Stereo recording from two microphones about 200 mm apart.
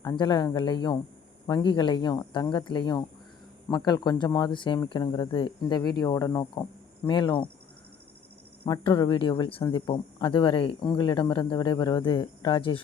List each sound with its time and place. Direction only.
0.0 s speech: 20° left (ahead or behind)
8.6 s speech: 25° left (ahead or behind)